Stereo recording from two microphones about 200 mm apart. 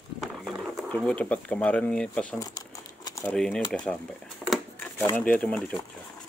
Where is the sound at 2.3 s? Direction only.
20° left (ahead or behind).